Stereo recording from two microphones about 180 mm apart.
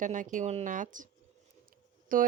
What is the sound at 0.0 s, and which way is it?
Speech, 45° right (ahead or behind).